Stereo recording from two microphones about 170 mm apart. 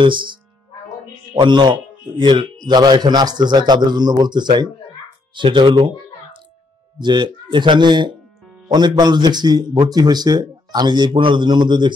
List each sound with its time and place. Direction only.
0.0 s a man's voice: 30° right (ahead or behind)
1.4 s a man's voice: 25° right (ahead or behind)
7.0 s a man's voice: 25° right (ahead or behind)